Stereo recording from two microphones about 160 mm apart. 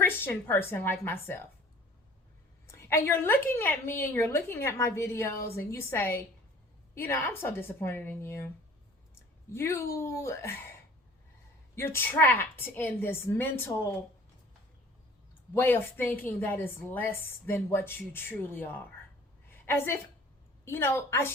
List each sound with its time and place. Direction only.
0.0 s a woman's voice: 15° left (ahead or behind)
2.6 s a woman's voice: 15° left (ahead or behind)
9.5 s a woman's voice: 15° left (ahead or behind)
11.7 s a woman's voice: 15° left (ahead or behind)
15.5 s a woman's voice: 15° left (ahead or behind)
19.5 s a sound: 15° left (ahead or behind)
20.7 s a woman's voice: 15° left (ahead or behind)